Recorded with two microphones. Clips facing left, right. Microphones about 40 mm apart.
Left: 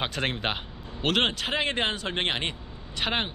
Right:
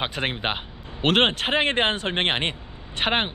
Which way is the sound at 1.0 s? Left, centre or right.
Right.